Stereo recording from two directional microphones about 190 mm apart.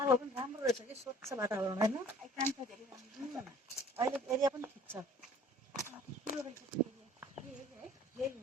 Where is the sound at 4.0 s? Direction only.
10° right (ahead or behind).